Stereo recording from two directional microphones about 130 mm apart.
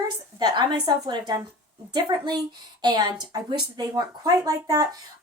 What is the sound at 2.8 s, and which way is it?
Speech, 30° right (ahead or behind).